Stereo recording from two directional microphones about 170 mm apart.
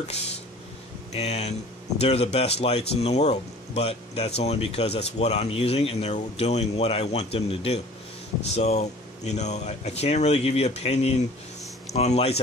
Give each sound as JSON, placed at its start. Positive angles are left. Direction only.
{"t": 1.1, "sound": "speech", "side_deg": 40}